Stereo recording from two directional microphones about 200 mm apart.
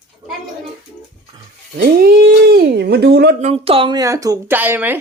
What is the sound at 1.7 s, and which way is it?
Speech, 50° right (ahead or behind).